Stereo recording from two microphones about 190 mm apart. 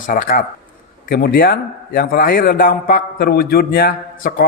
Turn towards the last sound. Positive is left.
turn(degrees=50)  # may be behind; listen again after turning